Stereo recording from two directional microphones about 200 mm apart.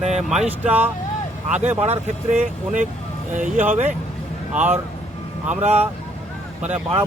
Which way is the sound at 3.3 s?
40° right (ahead or behind).